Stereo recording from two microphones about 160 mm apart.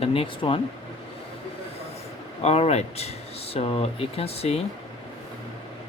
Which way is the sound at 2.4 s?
40° left (ahead or behind).